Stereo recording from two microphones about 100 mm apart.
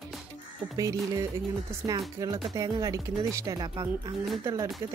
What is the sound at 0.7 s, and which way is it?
Speech, 35° right (ahead or behind).